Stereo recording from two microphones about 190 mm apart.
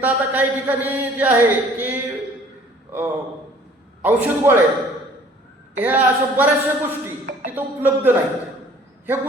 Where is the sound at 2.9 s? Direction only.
10° right (ahead or behind).